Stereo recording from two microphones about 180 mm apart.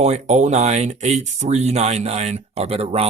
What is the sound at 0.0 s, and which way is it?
Speech, 40° right (ahead or behind).